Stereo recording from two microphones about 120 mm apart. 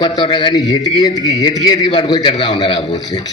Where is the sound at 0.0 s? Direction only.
35° left (ahead or behind).